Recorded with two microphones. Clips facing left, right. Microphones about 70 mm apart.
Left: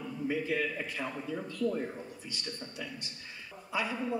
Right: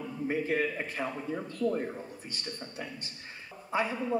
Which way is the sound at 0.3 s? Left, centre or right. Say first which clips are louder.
Right 3 dB; right.